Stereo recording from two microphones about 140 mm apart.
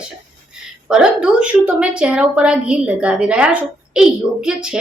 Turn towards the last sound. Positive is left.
turn(degrees=-5)  # may be behind; listen again after turning